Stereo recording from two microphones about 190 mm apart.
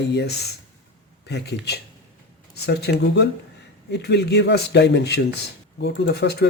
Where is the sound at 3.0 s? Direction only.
65° left (ahead or behind).